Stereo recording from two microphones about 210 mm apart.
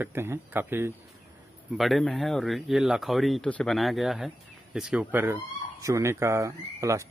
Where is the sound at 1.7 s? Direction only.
Centre (ahead or behind).